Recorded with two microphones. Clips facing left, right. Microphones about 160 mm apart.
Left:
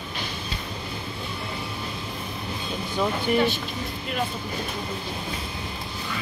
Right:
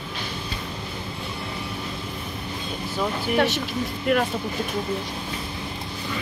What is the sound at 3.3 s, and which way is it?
Speech, 80° right.